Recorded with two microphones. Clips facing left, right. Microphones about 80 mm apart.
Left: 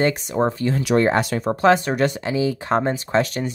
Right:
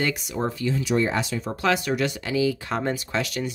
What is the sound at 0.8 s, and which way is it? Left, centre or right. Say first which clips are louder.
Speech: left 7 dB; left.